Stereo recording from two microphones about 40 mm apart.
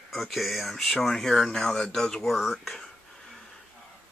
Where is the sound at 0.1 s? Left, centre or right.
Centre.